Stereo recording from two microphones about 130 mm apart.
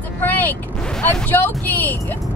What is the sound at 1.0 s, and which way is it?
Speech, 15° left (ahead or behind).